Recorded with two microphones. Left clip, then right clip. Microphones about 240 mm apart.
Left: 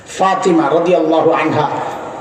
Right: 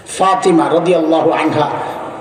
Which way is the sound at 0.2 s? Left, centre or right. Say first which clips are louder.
Right 1 dB; right.